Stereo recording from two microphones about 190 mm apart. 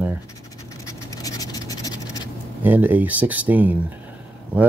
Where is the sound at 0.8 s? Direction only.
20° left (ahead or behind).